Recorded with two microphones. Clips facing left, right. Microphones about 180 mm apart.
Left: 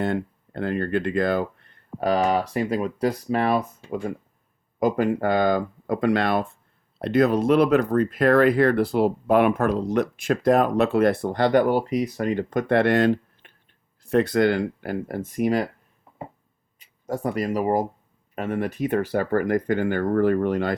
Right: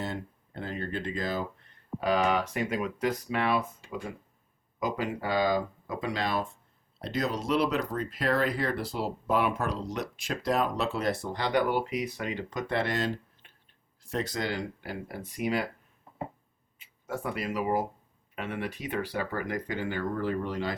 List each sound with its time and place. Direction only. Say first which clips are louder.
0.0 s speech: left 10 dB; 60° left (ahead or behind)
2.0 s speech: left 5 dB; 40° left (ahead or behind)
4.8 s speech: left 10 dB; 50° left (ahead or behind)
16.7 s speech: left 7 dB; 40° left (ahead or behind); by 20.7 s 55° left (ahead or behind)